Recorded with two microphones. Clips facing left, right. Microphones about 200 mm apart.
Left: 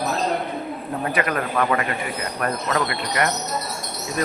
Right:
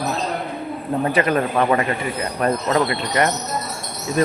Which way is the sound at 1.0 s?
25° right (ahead or behind).